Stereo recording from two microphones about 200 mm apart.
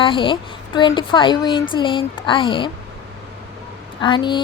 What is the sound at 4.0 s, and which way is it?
Speech, 25° left (ahead or behind).